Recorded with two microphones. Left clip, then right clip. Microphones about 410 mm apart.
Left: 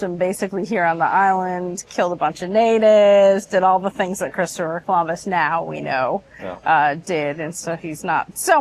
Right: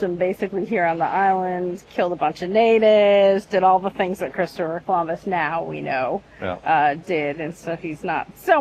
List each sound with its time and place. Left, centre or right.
0.0 s a woman's voice: centre